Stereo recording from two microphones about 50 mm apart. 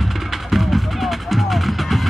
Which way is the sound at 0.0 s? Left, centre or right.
Centre.